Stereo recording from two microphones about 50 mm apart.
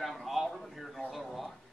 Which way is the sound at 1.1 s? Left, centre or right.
Centre.